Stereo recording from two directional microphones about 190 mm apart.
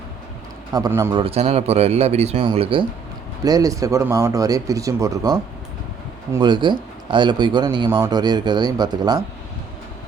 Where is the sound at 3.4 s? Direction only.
20° right (ahead or behind).